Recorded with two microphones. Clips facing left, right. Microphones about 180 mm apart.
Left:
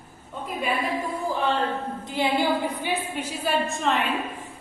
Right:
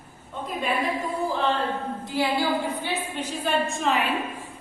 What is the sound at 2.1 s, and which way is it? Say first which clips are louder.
A woman's voice: left 1 dB; 20° left (ahead or behind).